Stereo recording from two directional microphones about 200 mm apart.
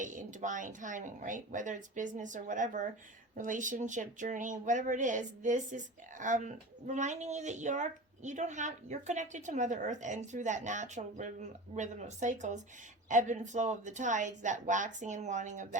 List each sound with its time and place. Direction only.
0.0 s speech: 40° right (ahead or behind)